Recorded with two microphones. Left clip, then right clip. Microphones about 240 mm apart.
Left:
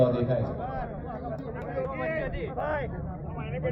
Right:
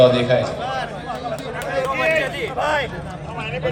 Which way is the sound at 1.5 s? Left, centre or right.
Right.